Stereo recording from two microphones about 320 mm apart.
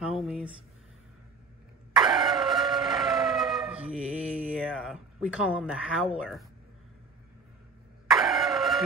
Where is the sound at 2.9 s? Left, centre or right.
Centre.